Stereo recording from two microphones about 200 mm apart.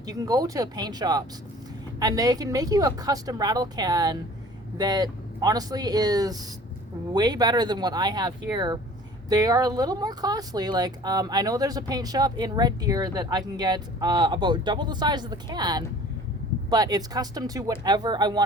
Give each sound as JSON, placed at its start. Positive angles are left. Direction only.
{"t": 0.0, "sound": "speech", "side_deg": -20}